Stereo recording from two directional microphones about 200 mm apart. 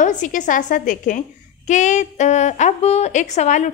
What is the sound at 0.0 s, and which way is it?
A woman's voice, 40° left (ahead or behind).